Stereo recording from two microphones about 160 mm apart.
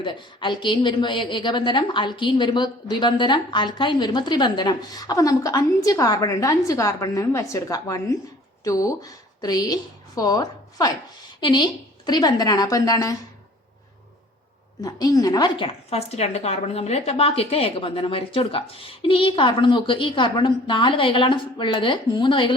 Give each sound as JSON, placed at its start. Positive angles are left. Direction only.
{"t": 0.0, "sound": "a woman's voice", "side_deg": 30}
{"t": 14.8, "sound": "a woman's voice", "side_deg": 20}